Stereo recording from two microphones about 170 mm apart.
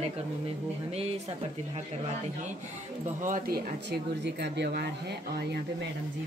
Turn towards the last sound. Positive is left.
turn(degrees=-75)  # may be behind; listen again after turning